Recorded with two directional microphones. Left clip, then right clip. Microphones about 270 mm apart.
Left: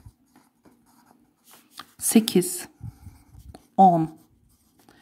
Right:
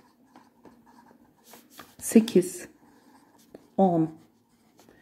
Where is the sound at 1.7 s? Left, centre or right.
Left.